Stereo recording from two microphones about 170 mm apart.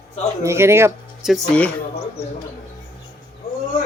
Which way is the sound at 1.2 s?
Centre (ahead or behind).